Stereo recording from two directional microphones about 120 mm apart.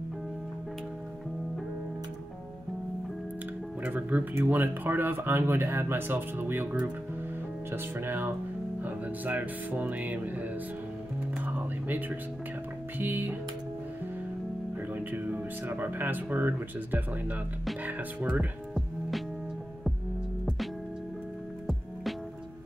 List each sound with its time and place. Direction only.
3.8 s speech: 15° right (ahead or behind)
11.4 s music: 15° right (ahead or behind)
13.0 s speech: 15° right (ahead or behind)
15.0 s speech: 15° right (ahead or behind)
18.8 s music: centre (ahead or behind)